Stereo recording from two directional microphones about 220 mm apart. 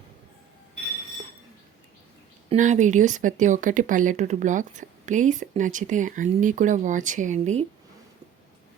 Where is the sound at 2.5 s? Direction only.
35° right (ahead or behind).